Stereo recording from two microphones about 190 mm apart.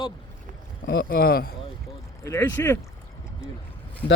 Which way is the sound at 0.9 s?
55° left (ahead or behind).